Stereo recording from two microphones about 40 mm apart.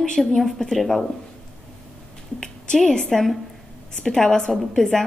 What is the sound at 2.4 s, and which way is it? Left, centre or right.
A woman's voice, centre.